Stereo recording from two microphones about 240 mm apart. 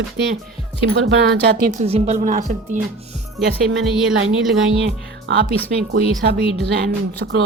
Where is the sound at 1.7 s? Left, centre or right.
Right.